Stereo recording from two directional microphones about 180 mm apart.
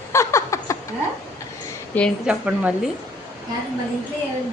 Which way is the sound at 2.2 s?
5° right (ahead or behind).